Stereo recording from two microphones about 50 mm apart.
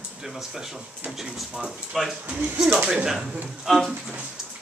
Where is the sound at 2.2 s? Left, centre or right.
Right.